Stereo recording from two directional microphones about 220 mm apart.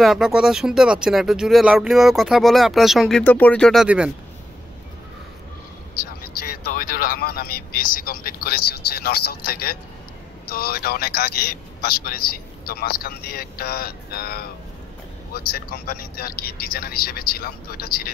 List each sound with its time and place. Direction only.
0.0 s speech: centre (ahead or behind)
6.2 s a sound: 45° left (ahead or behind)
7.2 s a man's voice: 45° left (ahead or behind)